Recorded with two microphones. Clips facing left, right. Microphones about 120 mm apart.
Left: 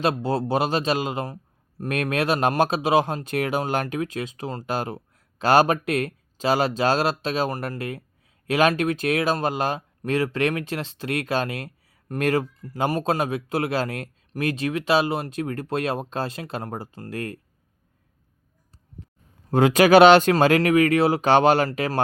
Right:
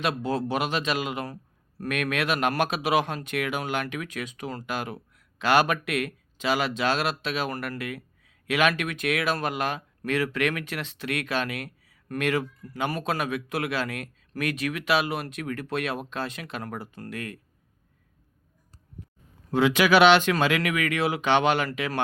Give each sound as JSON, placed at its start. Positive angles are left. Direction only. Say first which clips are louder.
{"t": 0.0, "sound": "speech", "louder": "left 4 dB", "side_deg": 30}
{"t": 19.5, "sound": "speech", "louder": "left 5 dB", "side_deg": 45}